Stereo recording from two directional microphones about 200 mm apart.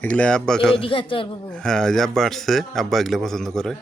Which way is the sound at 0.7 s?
25° left (ahead or behind).